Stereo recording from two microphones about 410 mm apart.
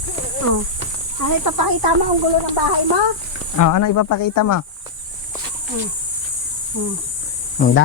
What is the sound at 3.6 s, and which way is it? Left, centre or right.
Speech, left.